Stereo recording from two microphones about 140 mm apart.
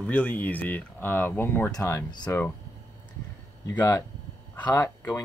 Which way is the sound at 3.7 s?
25° left (ahead or behind).